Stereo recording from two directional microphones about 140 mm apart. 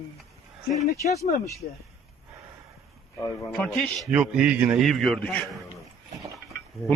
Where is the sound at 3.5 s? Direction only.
5° left (ahead or behind).